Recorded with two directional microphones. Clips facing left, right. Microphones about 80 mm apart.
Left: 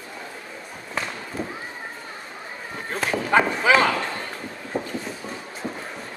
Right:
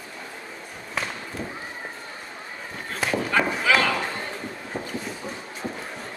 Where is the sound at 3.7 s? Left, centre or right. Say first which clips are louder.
Left 3 dB; left.